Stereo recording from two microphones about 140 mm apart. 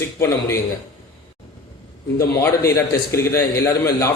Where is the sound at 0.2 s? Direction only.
20° left (ahead or behind).